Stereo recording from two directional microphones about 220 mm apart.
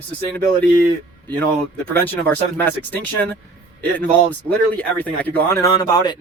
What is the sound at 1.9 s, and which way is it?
Speech, 10° left (ahead or behind).